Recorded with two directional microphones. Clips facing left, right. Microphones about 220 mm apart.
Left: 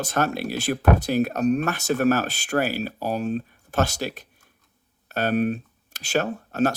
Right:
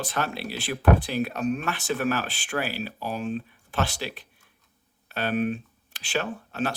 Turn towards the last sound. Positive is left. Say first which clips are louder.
# left 6 dB
turn(degrees=45)  # may be behind; listen again after turning